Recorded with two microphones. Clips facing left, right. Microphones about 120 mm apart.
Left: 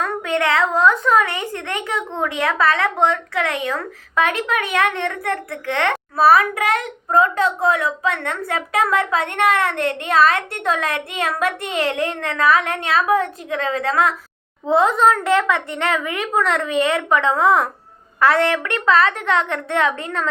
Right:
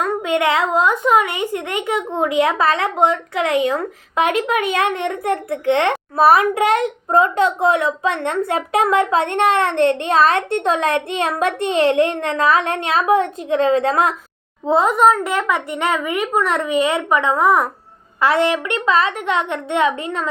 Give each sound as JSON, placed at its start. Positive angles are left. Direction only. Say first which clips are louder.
{"t": 0.0, "sound": "a child's voice", "louder": "right 3 dB", "side_deg": -15}
{"t": 14.7, "sound": "a woman's voice", "louder": "right 1 dB", "side_deg": -15}